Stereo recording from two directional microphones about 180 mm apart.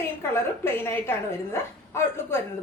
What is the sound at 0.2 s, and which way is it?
Speech, 15° left (ahead or behind).